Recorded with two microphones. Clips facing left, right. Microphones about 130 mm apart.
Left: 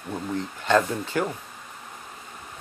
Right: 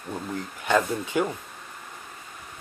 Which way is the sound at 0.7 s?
15° right (ahead or behind).